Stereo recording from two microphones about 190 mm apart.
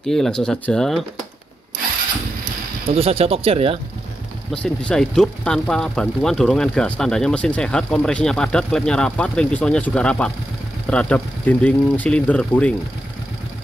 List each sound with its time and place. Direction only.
0.0 s speech: centre (ahead or behind)
2.9 s speech: 30° right (ahead or behind)
4.6 s speech: 5° left (ahead or behind)